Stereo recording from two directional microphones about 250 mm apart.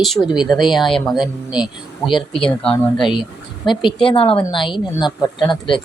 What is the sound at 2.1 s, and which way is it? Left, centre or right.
Speech, centre.